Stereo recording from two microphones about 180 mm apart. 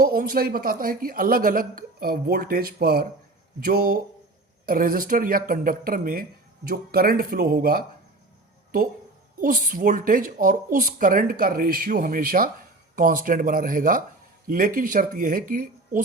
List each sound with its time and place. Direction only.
0.0 s speech: 55° right (ahead or behind)
9.4 s speech: 50° right (ahead or behind)